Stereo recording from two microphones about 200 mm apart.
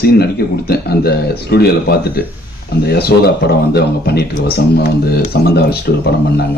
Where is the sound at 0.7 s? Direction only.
50° left (ahead or behind).